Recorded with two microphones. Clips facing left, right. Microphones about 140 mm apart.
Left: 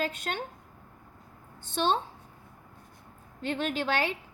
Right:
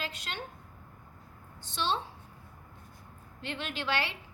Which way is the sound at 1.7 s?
50° left (ahead or behind).